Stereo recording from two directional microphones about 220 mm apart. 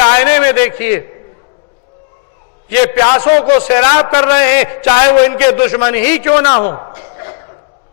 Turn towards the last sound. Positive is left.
turn(degrees=20)  # may be behind; listen again after turning